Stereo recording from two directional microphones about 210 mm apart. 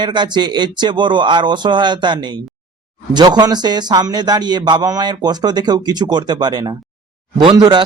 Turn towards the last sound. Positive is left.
turn(degrees=-20)  # may be behind; listen again after turning